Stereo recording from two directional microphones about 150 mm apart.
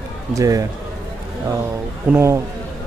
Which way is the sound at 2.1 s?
20° right (ahead or behind).